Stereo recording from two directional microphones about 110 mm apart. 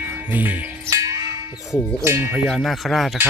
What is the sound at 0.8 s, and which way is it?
Music, 30° right (ahead or behind).